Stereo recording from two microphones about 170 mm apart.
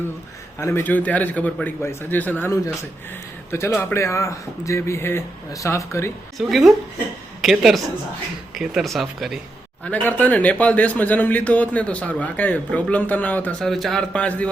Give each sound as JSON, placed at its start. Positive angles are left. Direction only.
{"t": 0.6, "sound": "speech", "side_deg": 15}
{"t": 6.3, "sound": "speech", "side_deg": 0}
{"t": 9.8, "sound": "speech", "side_deg": 10}